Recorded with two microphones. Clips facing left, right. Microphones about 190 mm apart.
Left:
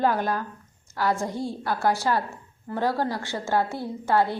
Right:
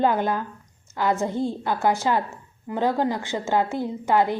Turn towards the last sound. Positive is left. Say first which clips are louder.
# right 2 dB
turn(degrees=-15)  # may be behind; listen again after turning